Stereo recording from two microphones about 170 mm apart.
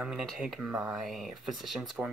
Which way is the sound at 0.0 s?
5° right (ahead or behind).